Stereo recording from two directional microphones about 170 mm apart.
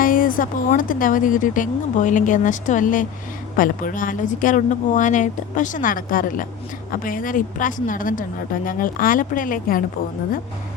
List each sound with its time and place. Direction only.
0.0 s speech: 55° left (ahead or behind)